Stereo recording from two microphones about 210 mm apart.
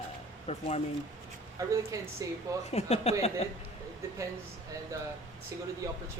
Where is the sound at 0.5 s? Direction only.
30° left (ahead or behind).